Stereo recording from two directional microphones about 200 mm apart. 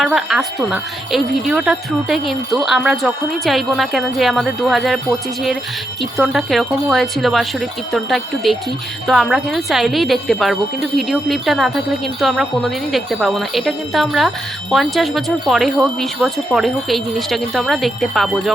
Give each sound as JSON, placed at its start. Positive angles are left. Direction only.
{"t": 0.0, "sound": "jingle bell", "side_deg": 0}
{"t": 6.0, "sound": "jingle bell", "side_deg": 0}